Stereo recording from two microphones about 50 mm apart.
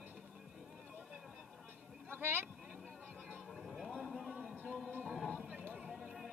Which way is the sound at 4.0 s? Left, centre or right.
Centre.